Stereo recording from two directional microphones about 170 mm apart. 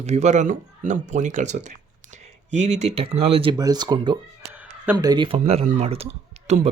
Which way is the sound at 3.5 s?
25° right (ahead or behind).